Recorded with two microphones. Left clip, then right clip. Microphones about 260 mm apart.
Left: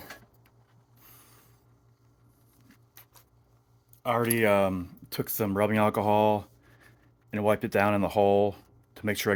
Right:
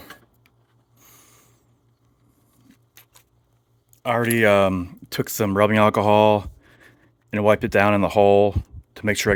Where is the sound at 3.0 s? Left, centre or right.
Right.